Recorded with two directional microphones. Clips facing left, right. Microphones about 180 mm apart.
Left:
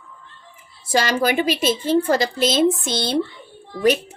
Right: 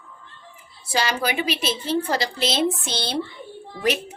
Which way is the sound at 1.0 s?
50° left (ahead or behind).